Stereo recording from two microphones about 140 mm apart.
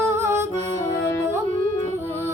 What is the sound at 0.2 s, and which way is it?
Music, 20° right (ahead or behind).